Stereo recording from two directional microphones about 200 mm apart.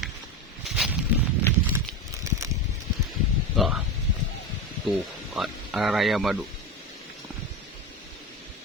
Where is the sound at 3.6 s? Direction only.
Centre (ahead or behind).